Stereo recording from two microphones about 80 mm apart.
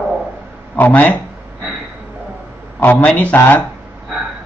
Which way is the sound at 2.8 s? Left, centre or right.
Left.